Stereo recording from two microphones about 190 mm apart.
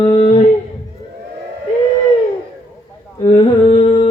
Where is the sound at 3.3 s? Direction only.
30° left (ahead or behind).